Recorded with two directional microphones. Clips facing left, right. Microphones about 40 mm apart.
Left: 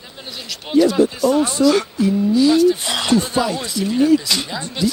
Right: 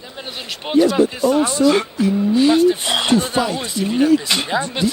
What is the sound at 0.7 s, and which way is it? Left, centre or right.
Speech, right.